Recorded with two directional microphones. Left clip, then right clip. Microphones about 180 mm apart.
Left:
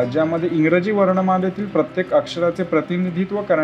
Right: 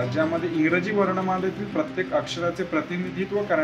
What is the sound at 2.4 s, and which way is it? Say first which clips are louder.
Speech: left 7 dB; 45° left (ahead or behind).